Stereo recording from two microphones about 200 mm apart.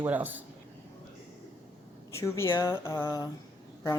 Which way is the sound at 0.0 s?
10° right (ahead or behind).